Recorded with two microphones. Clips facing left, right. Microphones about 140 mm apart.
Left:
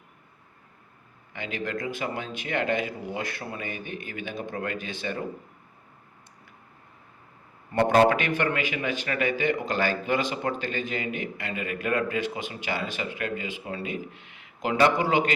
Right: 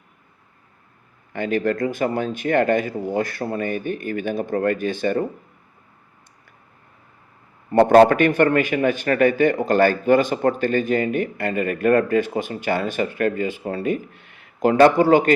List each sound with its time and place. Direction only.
1.3 s a man's voice: 50° right (ahead or behind)
7.7 s a man's voice: 45° right (ahead or behind)